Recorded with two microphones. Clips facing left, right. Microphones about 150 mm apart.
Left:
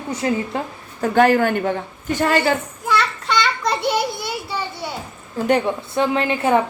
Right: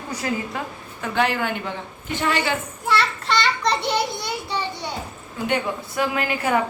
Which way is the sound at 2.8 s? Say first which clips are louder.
Right 1 dB; centre (ahead or behind).